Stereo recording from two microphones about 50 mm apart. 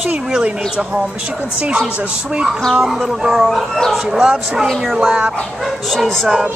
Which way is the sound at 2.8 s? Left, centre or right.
Centre.